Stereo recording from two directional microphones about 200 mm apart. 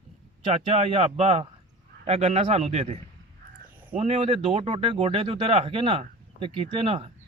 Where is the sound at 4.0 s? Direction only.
30° right (ahead or behind).